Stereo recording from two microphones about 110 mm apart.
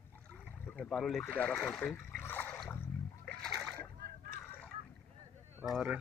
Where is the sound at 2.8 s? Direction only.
15° left (ahead or behind).